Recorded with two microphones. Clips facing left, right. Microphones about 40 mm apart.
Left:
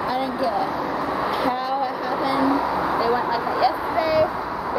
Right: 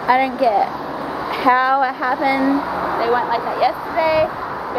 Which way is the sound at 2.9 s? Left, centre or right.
Right.